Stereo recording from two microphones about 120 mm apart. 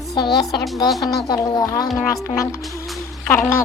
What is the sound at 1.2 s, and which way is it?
Speech, 30° left (ahead or behind).